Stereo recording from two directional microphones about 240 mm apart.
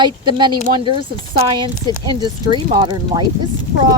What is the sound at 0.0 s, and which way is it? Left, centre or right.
Speech, centre.